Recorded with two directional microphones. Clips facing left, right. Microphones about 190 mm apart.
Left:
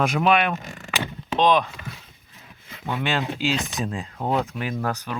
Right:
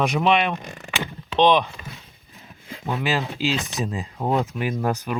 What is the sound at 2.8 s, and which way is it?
Speech, 5° right (ahead or behind).